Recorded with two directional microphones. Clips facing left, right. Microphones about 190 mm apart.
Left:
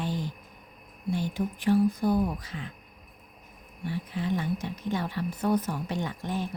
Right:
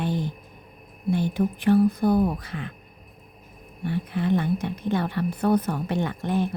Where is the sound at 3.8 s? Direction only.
60° right (ahead or behind).